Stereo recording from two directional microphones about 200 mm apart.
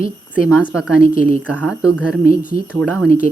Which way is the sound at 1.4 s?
5° right (ahead or behind).